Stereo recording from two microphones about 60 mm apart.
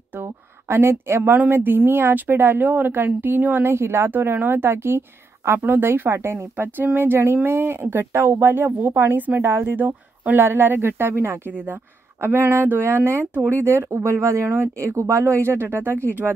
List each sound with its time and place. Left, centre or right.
0.7 s speech: right
3.7 s speech: right